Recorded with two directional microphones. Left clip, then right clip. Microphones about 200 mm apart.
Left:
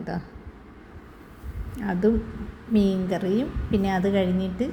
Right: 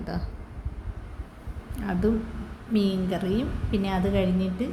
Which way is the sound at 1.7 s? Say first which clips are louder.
Left 3 dB; 10° left (ahead or behind).